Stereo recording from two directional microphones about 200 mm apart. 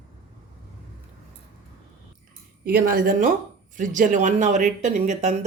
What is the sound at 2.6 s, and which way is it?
A woman's voice, 45° right (ahead or behind).